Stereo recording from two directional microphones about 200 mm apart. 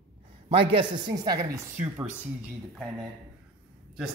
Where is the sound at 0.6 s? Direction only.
25° right (ahead or behind).